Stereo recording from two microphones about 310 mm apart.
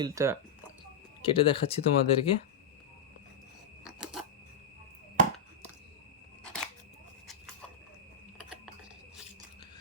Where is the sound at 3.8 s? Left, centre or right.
Centre.